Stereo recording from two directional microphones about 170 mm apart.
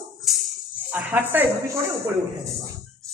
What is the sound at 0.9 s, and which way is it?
Speech, 10° right (ahead or behind).